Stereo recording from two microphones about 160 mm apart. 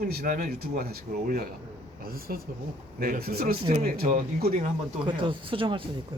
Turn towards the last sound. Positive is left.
turn(degrees=-35)  # may be behind; listen again after turning